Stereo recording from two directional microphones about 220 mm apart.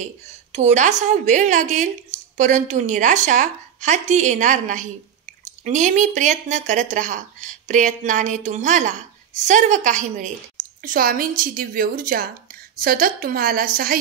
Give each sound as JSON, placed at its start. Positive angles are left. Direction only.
{"t": 0.0, "sound": "speech", "side_deg": -30}